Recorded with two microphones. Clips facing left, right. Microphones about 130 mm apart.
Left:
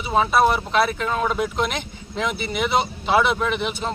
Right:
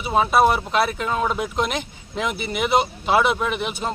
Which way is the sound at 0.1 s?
10° right (ahead or behind).